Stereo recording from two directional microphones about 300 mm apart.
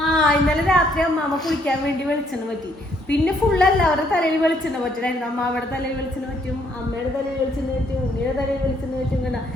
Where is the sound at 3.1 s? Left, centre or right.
Centre.